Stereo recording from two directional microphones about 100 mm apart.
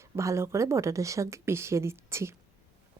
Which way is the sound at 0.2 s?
30° right (ahead or behind).